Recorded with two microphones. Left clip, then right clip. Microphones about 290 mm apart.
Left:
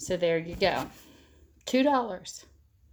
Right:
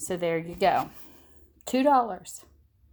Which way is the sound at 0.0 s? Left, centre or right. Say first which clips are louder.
Left 1 dB; right.